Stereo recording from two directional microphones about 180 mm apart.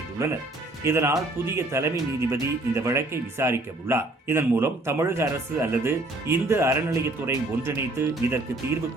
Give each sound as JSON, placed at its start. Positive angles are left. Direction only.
{"t": 0.9, "sound": "speech", "side_deg": -15}